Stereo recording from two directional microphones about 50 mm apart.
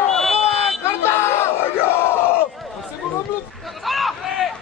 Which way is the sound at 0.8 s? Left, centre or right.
Left.